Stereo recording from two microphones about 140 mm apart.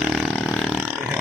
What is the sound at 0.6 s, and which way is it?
Burping, 10° right (ahead or behind).